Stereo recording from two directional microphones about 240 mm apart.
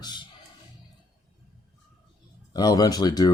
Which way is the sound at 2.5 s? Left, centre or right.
Centre.